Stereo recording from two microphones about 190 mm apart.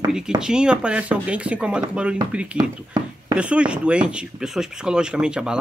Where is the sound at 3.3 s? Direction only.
5° right (ahead or behind).